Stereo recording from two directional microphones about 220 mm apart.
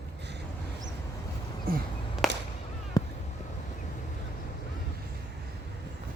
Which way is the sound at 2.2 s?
Centre (ahead or behind).